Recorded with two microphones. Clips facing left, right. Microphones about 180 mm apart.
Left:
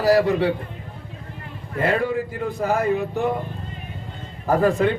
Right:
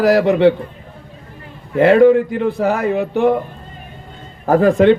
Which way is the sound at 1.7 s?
80° right.